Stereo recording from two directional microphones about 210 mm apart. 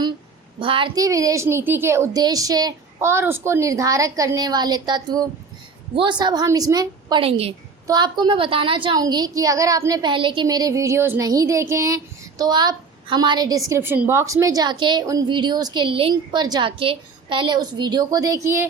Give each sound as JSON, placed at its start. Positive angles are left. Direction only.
{"t": 0.6, "sound": "a woman's voice", "side_deg": -25}